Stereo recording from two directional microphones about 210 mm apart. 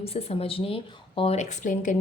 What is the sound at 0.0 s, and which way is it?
A woman's voice, 30° left (ahead or behind).